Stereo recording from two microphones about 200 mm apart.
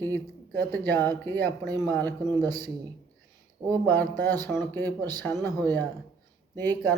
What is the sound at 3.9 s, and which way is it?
Speech, 10° left (ahead or behind).